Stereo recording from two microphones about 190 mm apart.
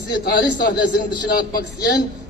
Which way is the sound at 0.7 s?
25° left (ahead or behind).